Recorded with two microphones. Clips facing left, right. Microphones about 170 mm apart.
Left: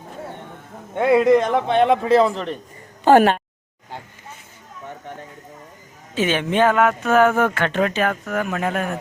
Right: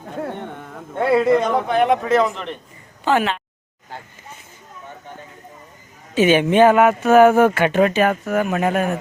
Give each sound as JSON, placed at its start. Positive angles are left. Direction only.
{"t": 0.9, "sound": "a man's voice", "side_deg": 20}
{"t": 3.0, "sound": "speech", "side_deg": 45}
{"t": 6.1, "sound": "speech", "side_deg": -10}